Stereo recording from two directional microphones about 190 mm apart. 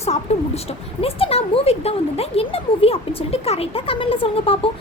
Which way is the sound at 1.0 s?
30° left (ahead or behind).